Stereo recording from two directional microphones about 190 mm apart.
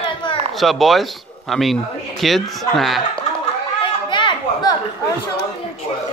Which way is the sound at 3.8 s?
25° left (ahead or behind).